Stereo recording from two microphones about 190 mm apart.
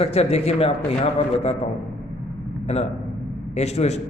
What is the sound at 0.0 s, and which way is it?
Speech, 30° left (ahead or behind).